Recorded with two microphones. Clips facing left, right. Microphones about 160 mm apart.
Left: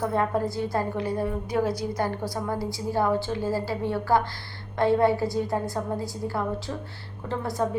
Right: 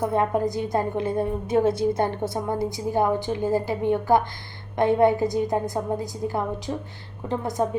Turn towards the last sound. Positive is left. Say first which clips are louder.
# right 3 dB
turn(degrees=-20)  # may be behind; listen again after turning